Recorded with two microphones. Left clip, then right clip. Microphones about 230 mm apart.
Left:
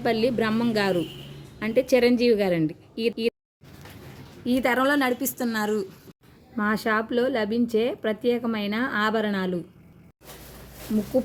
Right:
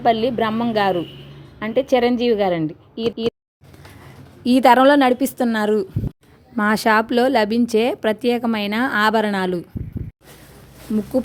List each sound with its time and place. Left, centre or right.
0.0 s speech: centre
4.4 s a woman's voice: right